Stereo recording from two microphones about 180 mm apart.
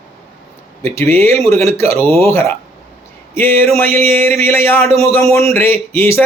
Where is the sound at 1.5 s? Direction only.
35° right (ahead or behind).